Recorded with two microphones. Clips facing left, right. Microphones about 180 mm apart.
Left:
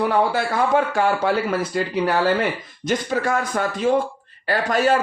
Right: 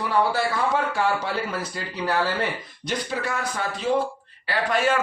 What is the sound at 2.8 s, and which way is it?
A man's voice, 50° left (ahead or behind).